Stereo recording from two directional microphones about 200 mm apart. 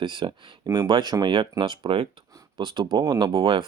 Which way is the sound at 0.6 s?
15° right (ahead or behind).